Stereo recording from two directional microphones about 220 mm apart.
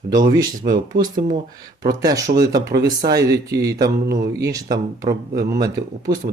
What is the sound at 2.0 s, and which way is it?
Speech, 15° right (ahead or behind).